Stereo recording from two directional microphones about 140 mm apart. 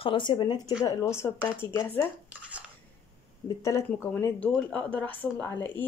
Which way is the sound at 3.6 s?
20° left (ahead or behind).